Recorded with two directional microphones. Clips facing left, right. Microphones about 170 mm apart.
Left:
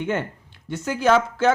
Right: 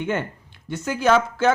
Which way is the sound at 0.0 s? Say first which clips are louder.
Even; 35° left (ahead or behind).